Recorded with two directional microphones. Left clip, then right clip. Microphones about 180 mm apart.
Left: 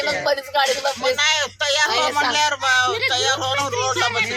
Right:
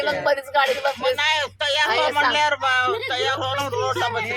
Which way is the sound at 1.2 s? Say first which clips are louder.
Left 2 dB; 45° right (ahead or behind).